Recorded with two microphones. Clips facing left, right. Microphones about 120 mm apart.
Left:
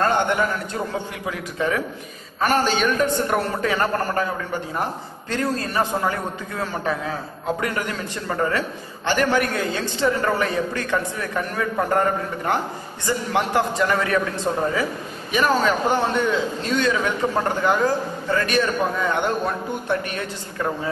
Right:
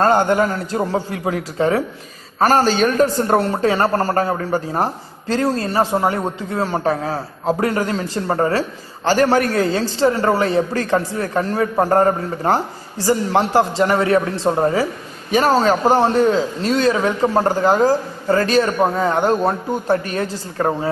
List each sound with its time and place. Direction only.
0.0 s a man's voice: 40° right (ahead or behind)
5.3 s a man's voice: 30° right (ahead or behind)